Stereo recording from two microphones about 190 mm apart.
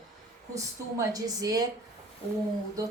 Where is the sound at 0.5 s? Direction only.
15° right (ahead or behind).